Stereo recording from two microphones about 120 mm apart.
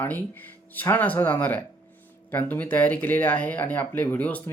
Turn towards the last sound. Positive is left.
turn(degrees=15)  # may be behind; listen again after turning